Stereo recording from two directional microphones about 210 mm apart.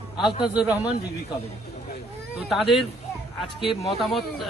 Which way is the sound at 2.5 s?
Centre (ahead or behind).